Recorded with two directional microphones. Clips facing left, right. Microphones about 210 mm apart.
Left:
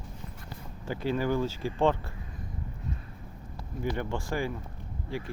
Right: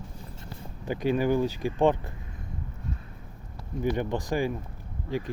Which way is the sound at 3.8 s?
20° right (ahead or behind).